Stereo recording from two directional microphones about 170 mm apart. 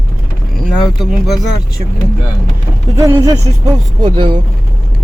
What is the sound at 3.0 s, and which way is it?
Speech, 20° right (ahead or behind).